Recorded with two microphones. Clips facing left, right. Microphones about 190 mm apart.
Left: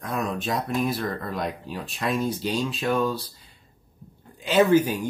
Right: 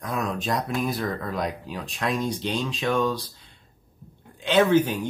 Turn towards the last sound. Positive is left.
turn(degrees=10)  # may be behind; listen again after turning